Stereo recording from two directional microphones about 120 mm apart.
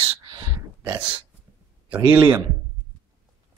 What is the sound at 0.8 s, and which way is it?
Speech, 15° right (ahead or behind).